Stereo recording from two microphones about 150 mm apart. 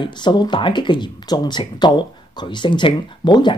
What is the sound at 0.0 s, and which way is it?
Speech, 30° left (ahead or behind).